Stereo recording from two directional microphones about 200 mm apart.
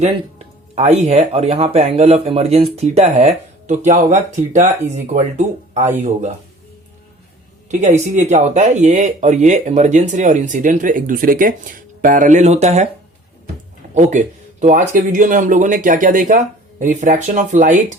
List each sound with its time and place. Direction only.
0.0 s speech: 35° right (ahead or behind)
7.7 s speech: 35° right (ahead or behind)
13.9 s speech: 40° right (ahead or behind)